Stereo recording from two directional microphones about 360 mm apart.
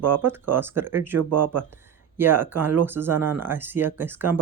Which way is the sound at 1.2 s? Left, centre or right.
Right.